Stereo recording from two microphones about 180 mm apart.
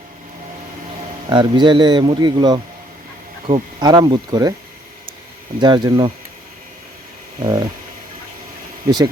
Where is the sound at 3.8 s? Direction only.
25° right (ahead or behind).